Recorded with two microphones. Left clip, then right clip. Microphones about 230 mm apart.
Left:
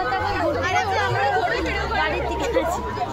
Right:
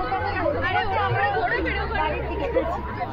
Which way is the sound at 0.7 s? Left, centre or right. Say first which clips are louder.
Left 2 dB; left.